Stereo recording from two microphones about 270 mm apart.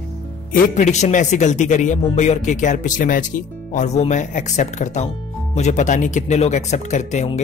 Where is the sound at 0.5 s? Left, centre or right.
Left.